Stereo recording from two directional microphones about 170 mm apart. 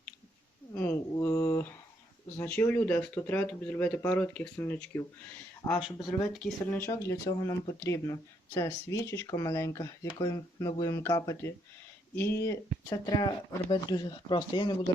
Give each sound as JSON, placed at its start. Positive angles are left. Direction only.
{"t": 0.7, "sound": "a sound", "side_deg": 15}
{"t": 2.4, "sound": "speech", "side_deg": 10}
{"t": 5.6, "sound": "speech", "side_deg": 20}
{"t": 6.3, "sound": "speech", "side_deg": 5}